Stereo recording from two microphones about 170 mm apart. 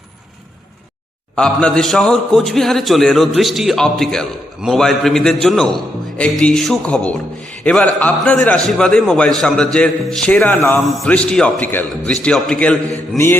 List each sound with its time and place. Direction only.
1.4 s a man's voice: 5° left (ahead or behind)
9.7 s mantra: 5° left (ahead or behind)
10.8 s a man's voice: centre (ahead or behind)
13.1 s mantra: 15° left (ahead or behind)